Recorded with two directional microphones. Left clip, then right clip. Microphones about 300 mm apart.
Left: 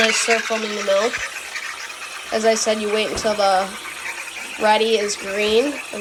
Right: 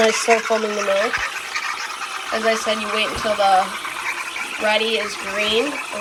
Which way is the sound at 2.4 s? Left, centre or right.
Centre.